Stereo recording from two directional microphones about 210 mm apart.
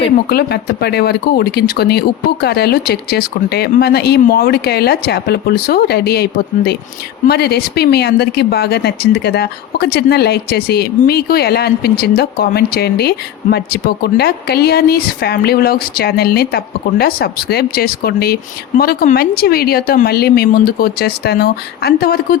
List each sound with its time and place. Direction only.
0.3 s speech: 50° left (ahead or behind)
7.3 s speech: 50° left (ahead or behind)